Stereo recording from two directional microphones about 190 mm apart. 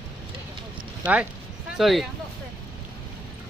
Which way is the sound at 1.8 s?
Centre (ahead or behind).